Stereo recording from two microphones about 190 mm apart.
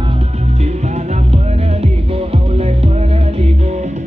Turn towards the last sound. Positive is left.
turn(degrees=-35)  # may be behind; listen again after turning